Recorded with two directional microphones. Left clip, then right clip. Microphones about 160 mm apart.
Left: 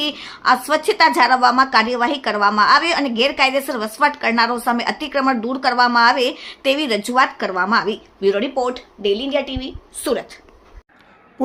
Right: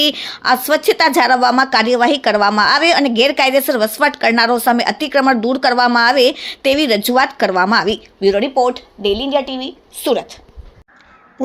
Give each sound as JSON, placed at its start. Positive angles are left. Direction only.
{"t": 0.0, "sound": "a woman's voice", "side_deg": -35}
{"t": 8.2, "sound": "a woman's voice", "side_deg": -20}